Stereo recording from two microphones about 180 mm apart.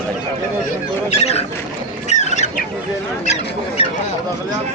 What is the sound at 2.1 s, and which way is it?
Chicken, 40° left (ahead or behind).